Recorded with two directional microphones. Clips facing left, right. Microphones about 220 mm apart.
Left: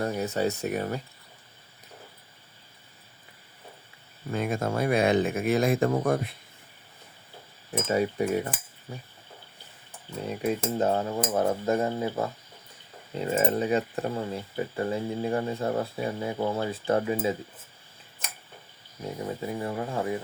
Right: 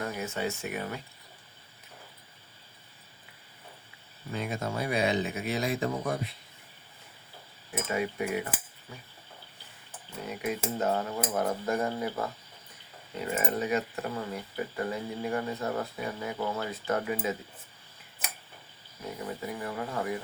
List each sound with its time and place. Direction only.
0.0 s speech: 35° left (ahead or behind)
4.3 s speech: 50° left (ahead or behind)
7.9 s speech: 40° left (ahead or behind)
10.2 s speech: 30° left (ahead or behind)
19.2 s speech: 25° left (ahead or behind)